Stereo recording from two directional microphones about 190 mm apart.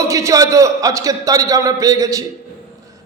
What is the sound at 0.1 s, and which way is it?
A man's voice, 15° right (ahead or behind).